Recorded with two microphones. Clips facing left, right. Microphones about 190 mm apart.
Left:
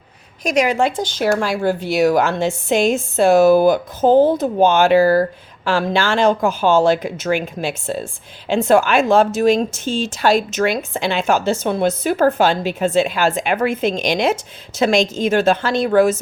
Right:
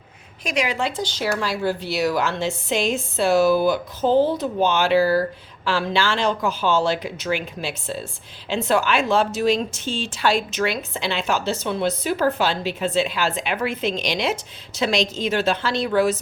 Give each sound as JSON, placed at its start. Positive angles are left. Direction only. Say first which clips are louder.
{"t": 0.4, "sound": "speech", "louder": "left 7 dB", "side_deg": 45}